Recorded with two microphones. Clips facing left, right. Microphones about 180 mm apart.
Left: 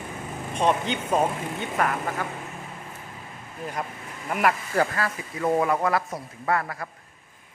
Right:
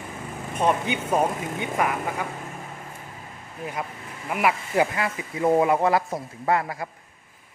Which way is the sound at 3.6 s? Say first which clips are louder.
Even; 10° right (ahead or behind).